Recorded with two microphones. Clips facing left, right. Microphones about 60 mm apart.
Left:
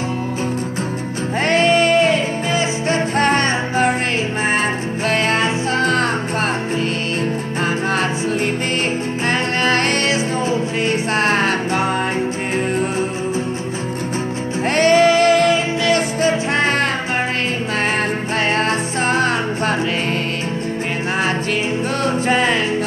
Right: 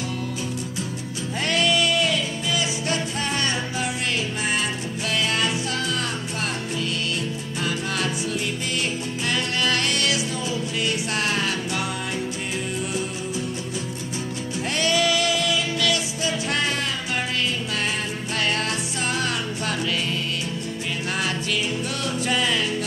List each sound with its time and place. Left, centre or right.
1.4 s music: left
5.1 s music: left
9.3 s music: left
14.8 s music: left
18.6 s music: left
22.0 s music: left